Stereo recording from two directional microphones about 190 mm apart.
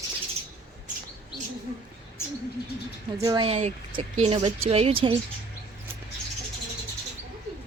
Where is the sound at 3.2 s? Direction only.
20° right (ahead or behind).